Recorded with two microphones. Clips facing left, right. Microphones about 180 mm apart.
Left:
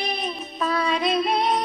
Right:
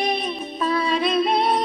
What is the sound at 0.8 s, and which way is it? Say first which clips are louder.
Female singing: right 2 dB; 30° right (ahead or behind).